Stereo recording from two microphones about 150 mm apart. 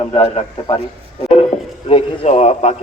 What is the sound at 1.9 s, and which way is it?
Speech, 45° left (ahead or behind).